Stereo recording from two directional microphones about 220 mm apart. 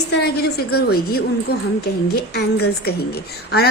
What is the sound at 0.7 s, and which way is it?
Speech, 45° left (ahead or behind).